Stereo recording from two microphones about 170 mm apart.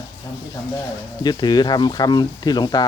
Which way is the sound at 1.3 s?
25° left (ahead or behind).